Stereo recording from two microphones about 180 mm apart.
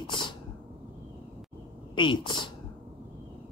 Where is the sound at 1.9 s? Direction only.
25° left (ahead or behind).